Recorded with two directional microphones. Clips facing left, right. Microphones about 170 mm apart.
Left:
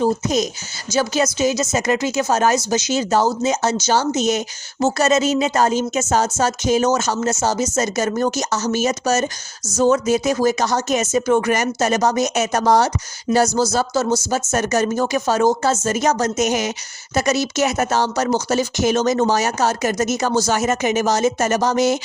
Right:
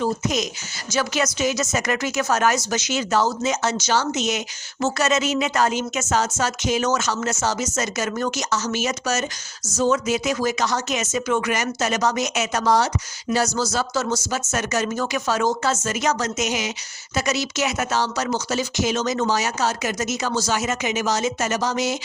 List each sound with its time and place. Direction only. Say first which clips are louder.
0.0 s speech: left 5 dB; 35° left (ahead or behind)
2.9 s speech: left 3 dB; 35° left (ahead or behind)
12.6 s speech: left 3 dB; 55° left (ahead or behind)
13.3 s speech: left 5 dB; 25° left (ahead or behind)
13.7 s speech: left 5 dB; 45° left (ahead or behind)
20.1 s speech: left 5 dB; 50° left (ahead or behind)